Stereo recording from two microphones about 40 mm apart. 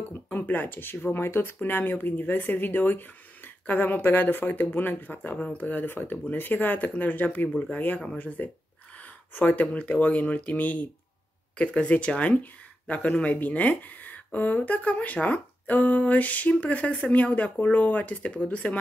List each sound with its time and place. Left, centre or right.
0.3 s speech: left
1.6 s speech: left
5.4 s speech: left
5.8 s speech: left
8.9 s a sound: left
9.8 s speech: left
11.5 s speech: left